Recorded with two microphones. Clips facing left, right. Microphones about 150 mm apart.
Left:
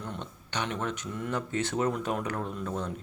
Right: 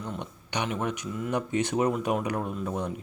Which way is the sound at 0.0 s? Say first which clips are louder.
Right 3 dB; 10° right (ahead or behind).